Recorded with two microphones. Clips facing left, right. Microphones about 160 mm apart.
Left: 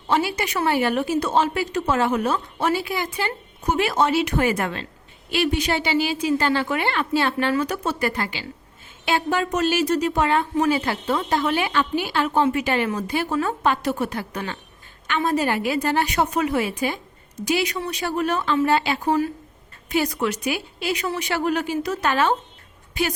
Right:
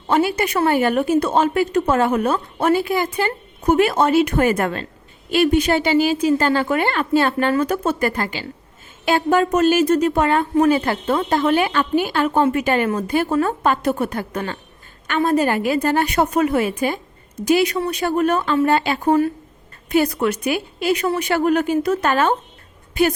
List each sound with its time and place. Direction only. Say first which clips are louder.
0.1 s a woman's voice: right 4 dB; 50° right (ahead or behind)